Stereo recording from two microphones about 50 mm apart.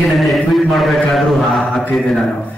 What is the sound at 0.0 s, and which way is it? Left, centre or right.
Mantra, centre.